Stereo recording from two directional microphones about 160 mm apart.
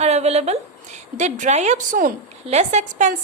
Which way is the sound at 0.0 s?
40° right (ahead or behind).